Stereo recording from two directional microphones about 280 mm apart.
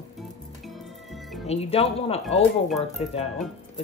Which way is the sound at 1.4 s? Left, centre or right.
Left.